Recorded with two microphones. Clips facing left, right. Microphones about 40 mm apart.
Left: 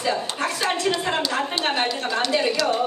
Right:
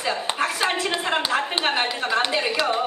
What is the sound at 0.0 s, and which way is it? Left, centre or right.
A woman's voice, centre.